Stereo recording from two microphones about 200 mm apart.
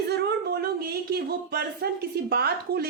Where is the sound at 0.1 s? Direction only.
55° right (ahead or behind).